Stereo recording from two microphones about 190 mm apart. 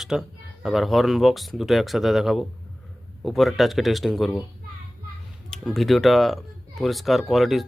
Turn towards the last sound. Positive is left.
turn(degrees=0)  # may be behind; listen again after turning